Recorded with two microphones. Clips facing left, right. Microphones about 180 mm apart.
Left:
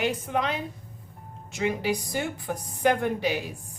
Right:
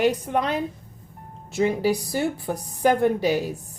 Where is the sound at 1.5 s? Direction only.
35° right (ahead or behind).